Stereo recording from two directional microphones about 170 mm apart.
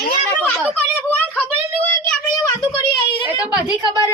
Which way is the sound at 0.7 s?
10° left (ahead or behind).